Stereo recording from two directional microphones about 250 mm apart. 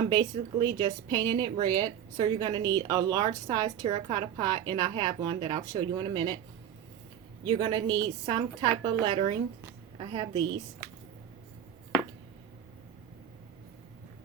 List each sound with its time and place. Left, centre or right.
0.2 s speech: centre
7.4 s a woman's voice: centre